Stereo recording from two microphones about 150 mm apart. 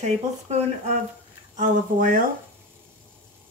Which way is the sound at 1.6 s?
65° right (ahead or behind).